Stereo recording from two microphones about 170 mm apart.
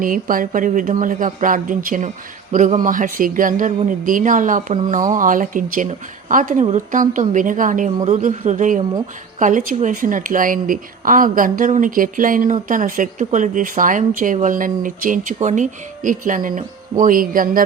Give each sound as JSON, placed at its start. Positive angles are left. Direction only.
{"t": 0.0, "sound": "a man's voice", "side_deg": -55}